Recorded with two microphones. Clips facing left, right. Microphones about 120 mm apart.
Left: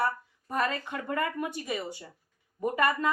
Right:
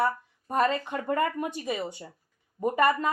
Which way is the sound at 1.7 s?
20° right (ahead or behind).